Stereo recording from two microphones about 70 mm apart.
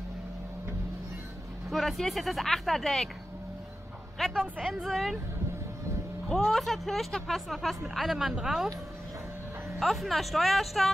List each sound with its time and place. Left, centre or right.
1.7 s speech: centre
4.3 s speech: centre
4.8 s speech: centre
6.2 s speech: centre
9.8 s speech: centre